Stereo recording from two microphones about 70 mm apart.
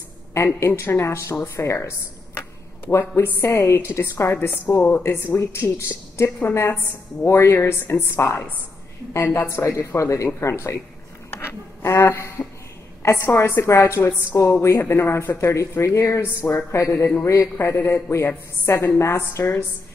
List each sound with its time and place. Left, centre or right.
0.6 s a woman's voice: left
11.2 s a sound: left
13.0 s a woman's voice: left